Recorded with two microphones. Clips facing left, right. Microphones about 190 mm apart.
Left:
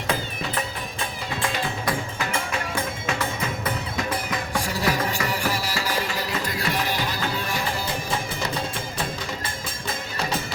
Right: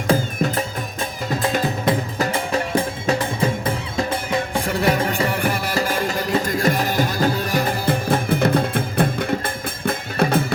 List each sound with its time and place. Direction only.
0.1 s music: 40° right (ahead or behind)
4.6 s music: 55° right (ahead or behind)